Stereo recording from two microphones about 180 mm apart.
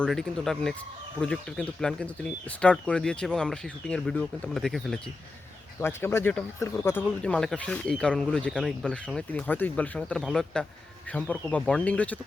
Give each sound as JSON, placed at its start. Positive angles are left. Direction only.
{"t": 0.0, "sound": "speech", "side_deg": 5}
{"t": 5.8, "sound": "speech", "side_deg": 15}